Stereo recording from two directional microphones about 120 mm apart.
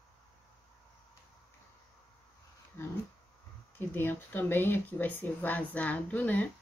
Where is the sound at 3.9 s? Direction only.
15° left (ahead or behind).